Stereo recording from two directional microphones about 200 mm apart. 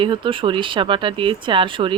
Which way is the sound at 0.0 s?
25° right (ahead or behind).